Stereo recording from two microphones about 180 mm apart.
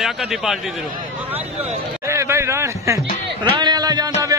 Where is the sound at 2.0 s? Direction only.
15° right (ahead or behind).